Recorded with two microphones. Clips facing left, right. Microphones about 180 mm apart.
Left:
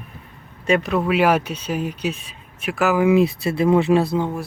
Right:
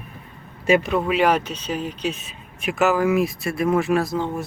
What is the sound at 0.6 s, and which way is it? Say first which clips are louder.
Speech: even; 5° right (ahead or behind).